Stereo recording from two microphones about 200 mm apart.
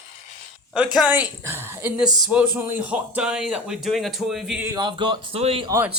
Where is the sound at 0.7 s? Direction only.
Centre (ahead or behind).